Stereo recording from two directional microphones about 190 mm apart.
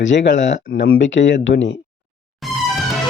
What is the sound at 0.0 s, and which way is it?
Speech, 70° left (ahead or behind).